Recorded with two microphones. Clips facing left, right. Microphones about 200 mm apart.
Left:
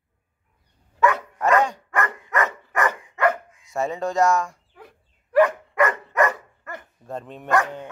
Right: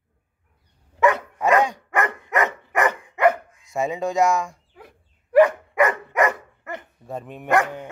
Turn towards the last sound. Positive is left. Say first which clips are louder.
# right 1 dB
turn(degrees=-10)  # may be behind; listen again after turning